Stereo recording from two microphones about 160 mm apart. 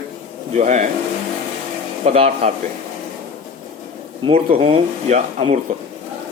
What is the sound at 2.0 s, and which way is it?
Speech, 40° right (ahead or behind).